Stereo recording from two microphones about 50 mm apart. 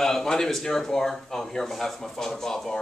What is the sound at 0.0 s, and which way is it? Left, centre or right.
Speech, centre.